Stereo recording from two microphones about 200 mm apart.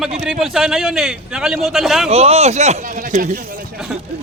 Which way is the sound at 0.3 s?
Centre (ahead or behind).